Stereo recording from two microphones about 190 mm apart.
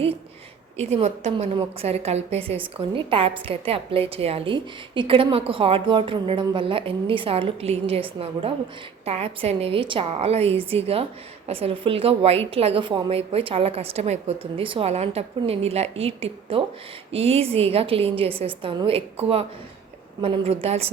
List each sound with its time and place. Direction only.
0.8 s a woman's voice: 35° right (ahead or behind)